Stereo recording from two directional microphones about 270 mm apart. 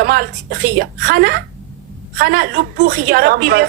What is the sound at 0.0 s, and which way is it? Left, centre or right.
A woman's voice, right.